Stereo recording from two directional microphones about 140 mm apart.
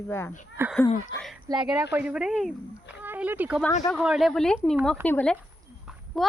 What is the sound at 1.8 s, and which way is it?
Speech, 10° right (ahead or behind).